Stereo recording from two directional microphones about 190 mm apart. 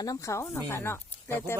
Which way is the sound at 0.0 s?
15° left (ahead or behind).